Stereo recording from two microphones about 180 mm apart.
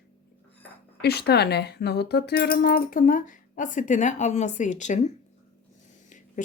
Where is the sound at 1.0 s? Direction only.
65° left (ahead or behind); by 4.9 s 40° left (ahead or behind).